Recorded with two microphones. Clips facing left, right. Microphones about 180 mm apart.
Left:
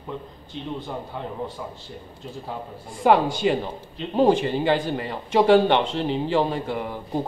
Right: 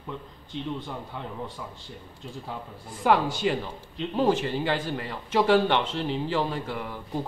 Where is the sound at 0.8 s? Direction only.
20° left (ahead or behind).